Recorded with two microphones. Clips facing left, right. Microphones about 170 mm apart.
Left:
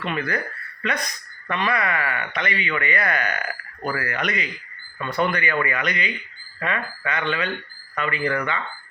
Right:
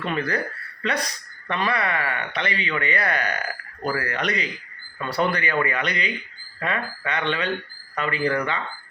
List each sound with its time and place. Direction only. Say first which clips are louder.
0.0 s speech: right 1 dB; 35° right (ahead or behind)